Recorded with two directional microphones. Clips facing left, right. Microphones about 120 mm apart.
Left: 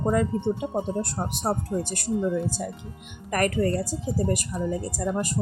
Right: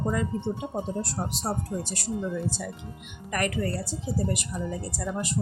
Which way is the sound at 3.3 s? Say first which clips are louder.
Left 5 dB; 45° left (ahead or behind).